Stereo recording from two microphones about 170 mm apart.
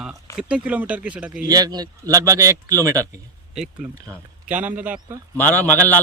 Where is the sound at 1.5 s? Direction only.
20° right (ahead or behind).